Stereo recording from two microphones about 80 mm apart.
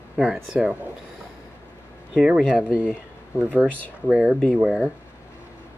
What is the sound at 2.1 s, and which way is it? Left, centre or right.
Speech, centre.